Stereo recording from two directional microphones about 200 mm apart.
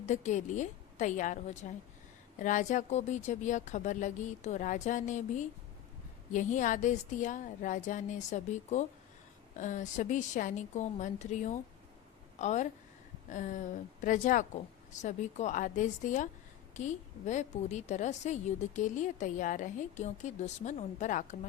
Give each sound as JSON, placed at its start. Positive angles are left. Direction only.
{"t": 0.0, "sound": "a woman's voice", "side_deg": 35}